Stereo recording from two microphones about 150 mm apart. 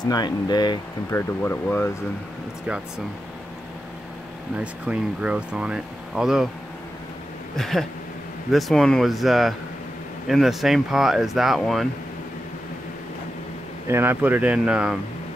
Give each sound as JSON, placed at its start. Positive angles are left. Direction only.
{"t": 0.0, "sound": "speech", "side_deg": 25}
{"t": 1.1, "sound": "speech", "side_deg": 15}
{"t": 4.6, "sound": "speech", "side_deg": -5}
{"t": 7.5, "sound": "speech", "side_deg": 0}
{"t": 13.8, "sound": "speech", "side_deg": -15}